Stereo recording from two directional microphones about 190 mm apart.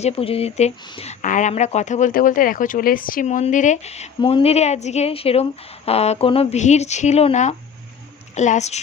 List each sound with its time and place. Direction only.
0.0 s speech: 30° left (ahead or behind)